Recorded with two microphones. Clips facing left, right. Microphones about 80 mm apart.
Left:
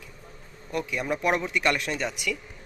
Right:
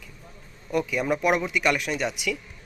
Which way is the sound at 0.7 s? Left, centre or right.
Centre.